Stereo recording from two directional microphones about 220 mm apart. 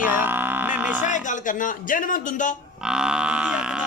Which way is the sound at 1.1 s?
35° left (ahead or behind).